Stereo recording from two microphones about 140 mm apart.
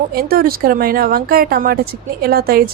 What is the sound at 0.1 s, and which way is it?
Speech, 90° right.